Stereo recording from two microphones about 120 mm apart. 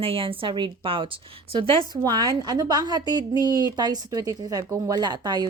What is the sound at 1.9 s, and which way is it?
A woman's voice, 35° right (ahead or behind).